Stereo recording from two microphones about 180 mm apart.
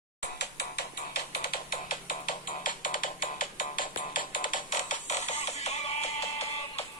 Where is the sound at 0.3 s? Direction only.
65° left (ahead or behind).